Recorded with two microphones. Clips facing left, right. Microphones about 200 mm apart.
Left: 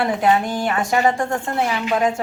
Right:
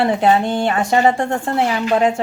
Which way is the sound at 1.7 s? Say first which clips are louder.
Right 4 dB; 35° right (ahead or behind).